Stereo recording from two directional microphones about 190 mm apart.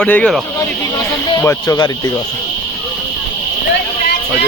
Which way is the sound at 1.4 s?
15° left (ahead or behind).